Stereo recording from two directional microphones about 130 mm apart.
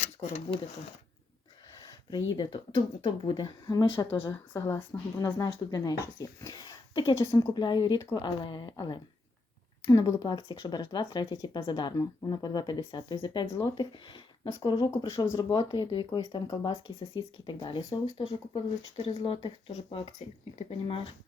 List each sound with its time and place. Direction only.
0.0 s speech: 50° left (ahead or behind)
1.9 s speech: 30° left (ahead or behind)
4.5 s speech: 25° left (ahead or behind); by 19.7 s 45° left (ahead or behind)
19.7 s speech: 60° left (ahead or behind)
20.7 s speech: 45° left (ahead or behind)